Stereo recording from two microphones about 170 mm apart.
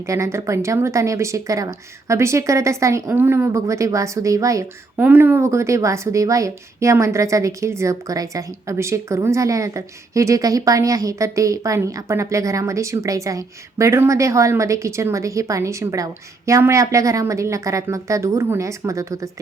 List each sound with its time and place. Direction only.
0.1 s speech: 15° right (ahead or behind)